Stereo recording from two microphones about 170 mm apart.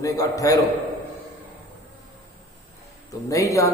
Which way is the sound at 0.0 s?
20° left (ahead or behind).